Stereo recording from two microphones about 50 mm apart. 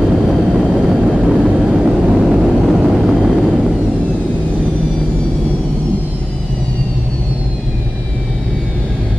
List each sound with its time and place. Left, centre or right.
0.0 s vehicle: centre
1.0 s vehicle: centre
1.7 s vehicle: centre